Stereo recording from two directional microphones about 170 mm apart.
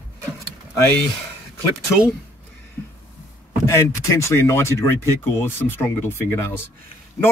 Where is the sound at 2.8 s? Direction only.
15° left (ahead or behind).